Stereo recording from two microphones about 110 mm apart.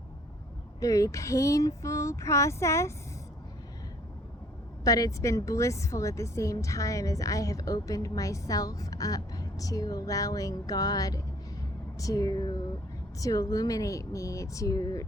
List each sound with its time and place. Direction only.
0.8 s female singing: 30° left (ahead or behind)
4.8 s a woman's voice: 35° left (ahead or behind)